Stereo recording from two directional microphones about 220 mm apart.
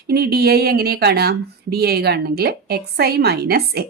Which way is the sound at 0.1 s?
45° right (ahead or behind).